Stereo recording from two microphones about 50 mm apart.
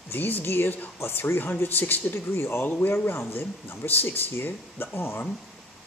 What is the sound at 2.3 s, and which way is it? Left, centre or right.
Speech, left.